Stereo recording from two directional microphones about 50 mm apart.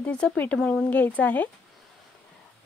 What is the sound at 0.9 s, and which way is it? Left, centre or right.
Speech, left.